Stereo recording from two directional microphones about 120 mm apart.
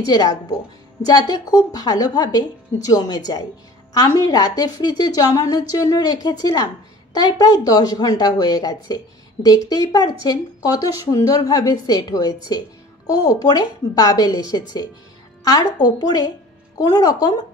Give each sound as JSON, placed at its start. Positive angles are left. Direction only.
{"t": 0.0, "sound": "a woman's voice", "side_deg": 30}